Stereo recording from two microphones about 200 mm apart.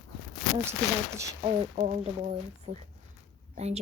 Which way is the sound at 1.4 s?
35° right (ahead or behind).